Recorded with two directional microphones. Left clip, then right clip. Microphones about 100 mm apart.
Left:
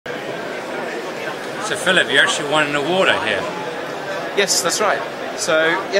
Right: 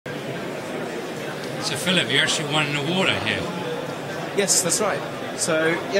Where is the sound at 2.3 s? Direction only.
40° right (ahead or behind).